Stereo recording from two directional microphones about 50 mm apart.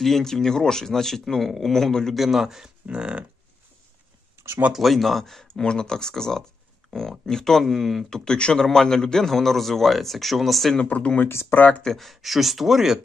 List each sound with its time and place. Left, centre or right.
0.0 s speech: centre
2.1 s a man's voice: centre
2.9 s livestock: right
4.7 s a man's voice: centre
8.1 s a man's voice: centre
10.9 s speech: left
11.8 s a man's voice: centre